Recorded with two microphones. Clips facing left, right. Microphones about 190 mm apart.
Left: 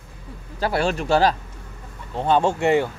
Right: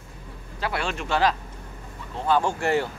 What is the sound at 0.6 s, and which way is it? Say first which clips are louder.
Speech: left 7 dB; 40° left (ahead or behind).